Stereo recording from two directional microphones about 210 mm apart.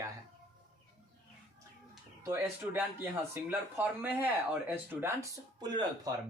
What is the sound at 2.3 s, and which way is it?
Speech, 10° right (ahead or behind).